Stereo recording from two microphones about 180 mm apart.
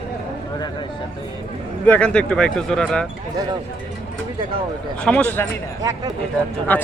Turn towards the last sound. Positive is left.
turn(degrees=10)  # may be behind; listen again after turning